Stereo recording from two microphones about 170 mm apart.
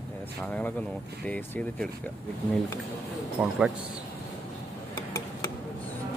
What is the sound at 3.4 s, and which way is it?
Speech, 5° right (ahead or behind).